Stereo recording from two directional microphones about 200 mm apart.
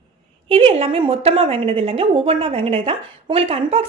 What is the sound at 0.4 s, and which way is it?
A woman's voice, 25° right (ahead or behind).